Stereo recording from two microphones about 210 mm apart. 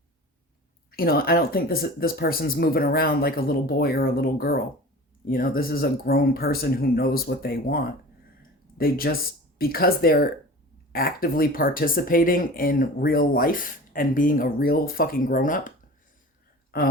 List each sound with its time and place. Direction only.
0.9 s speech: 45° left (ahead or behind)
8.4 s a sound: 45° left (ahead or behind)
9.6 s speech: 45° left (ahead or behind)
16.7 s speech: 45° left (ahead or behind)